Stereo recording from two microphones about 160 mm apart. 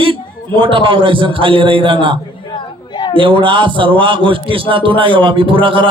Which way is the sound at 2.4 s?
30° left (ahead or behind).